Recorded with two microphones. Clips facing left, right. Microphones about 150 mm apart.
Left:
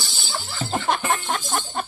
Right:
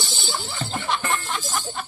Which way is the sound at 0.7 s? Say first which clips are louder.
Left 4 dB; 50° left (ahead or behind).